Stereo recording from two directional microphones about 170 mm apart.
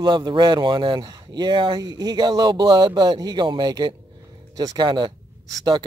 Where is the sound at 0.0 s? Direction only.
25° right (ahead or behind).